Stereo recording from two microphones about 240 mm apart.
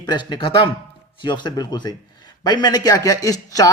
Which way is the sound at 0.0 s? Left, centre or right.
Centre.